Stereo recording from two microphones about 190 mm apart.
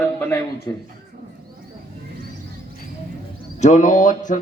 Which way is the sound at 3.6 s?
40° left (ahead or behind).